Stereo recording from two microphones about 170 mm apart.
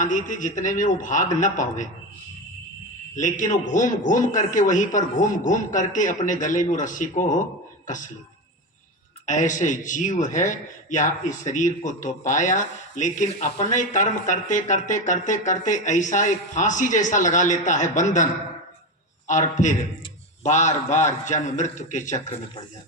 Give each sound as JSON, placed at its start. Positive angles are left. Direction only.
{"t": 0.0, "sound": "a man's voice", "side_deg": 50}
{"t": 3.2, "sound": "a man's voice", "side_deg": 50}
{"t": 9.2, "sound": "a man's voice", "side_deg": 45}
{"t": 19.3, "sound": "a man's voice", "side_deg": 45}